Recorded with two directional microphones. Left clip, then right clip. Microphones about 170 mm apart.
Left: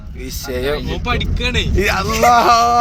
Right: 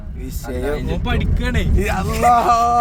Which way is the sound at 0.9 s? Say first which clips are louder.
Left 3 dB; 45° right (ahead or behind).